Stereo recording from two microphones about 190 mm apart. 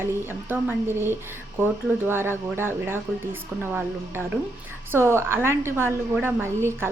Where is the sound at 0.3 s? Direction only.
10° right (ahead or behind).